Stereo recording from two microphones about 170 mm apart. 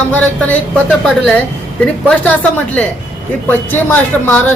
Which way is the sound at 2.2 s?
10° left (ahead or behind).